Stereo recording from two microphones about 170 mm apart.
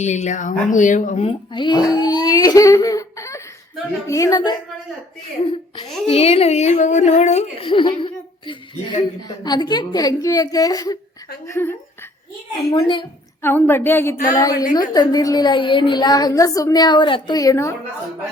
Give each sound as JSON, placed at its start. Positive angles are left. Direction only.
{"t": 0.0, "sound": "speech", "side_deg": 45}
{"t": 6.1, "sound": "speech", "side_deg": 35}
{"t": 13.4, "sound": "speech", "side_deg": 10}